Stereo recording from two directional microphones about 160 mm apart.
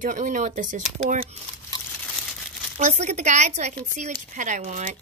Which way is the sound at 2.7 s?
45° right (ahead or behind).